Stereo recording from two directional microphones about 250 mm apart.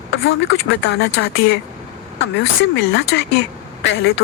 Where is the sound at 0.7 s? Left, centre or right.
Left.